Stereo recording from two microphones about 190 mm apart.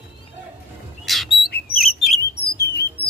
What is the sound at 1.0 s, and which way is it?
Squawk, centre (ahead or behind).